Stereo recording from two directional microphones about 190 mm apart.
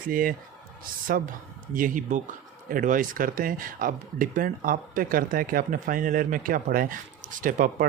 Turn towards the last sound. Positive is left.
turn(degrees=-45)  # may be behind; listen again after turning